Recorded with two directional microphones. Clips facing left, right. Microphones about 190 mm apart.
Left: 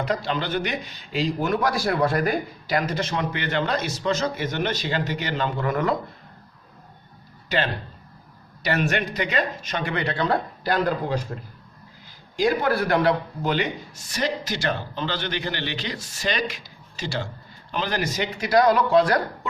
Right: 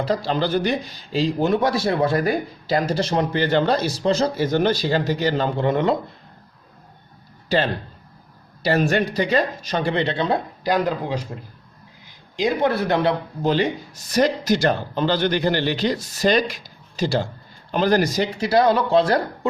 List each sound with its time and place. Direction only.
0.0 s a man's voice: 30° right (ahead or behind)
8.6 s a man's voice: 30° right (ahead or behind); by 10.8 s 15° right (ahead or behind)
12.4 s speech: 20° right (ahead or behind)
14.1 s a man's voice: 40° right (ahead or behind)